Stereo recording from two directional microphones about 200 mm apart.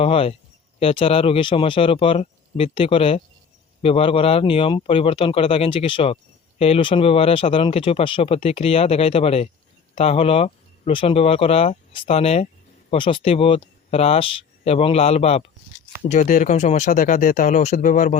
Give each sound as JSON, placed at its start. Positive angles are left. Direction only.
{"t": 0.0, "sound": "speech", "side_deg": 30}